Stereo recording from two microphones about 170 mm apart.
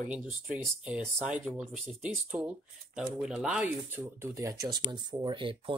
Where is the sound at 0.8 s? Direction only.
5° right (ahead or behind).